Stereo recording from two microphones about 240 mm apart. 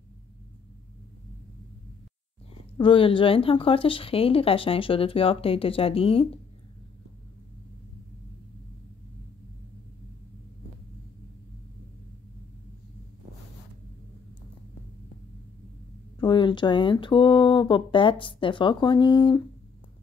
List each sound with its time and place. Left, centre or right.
2.8 s speech: left
16.2 s speech: centre